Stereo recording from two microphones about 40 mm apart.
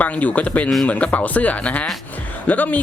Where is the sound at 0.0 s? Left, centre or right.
Left.